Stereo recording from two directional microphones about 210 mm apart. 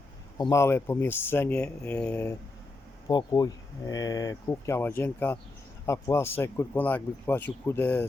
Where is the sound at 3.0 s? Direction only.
20° left (ahead or behind).